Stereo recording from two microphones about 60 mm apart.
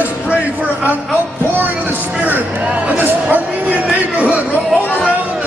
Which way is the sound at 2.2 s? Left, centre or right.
Right.